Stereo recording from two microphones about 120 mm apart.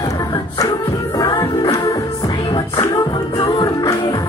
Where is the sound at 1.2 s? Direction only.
30° left (ahead or behind).